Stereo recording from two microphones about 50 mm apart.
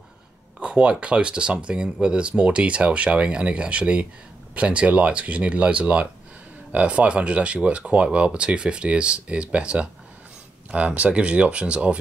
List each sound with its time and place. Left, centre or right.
0.6 s a sound: right
1.0 s speech: right
11.0 s speech: right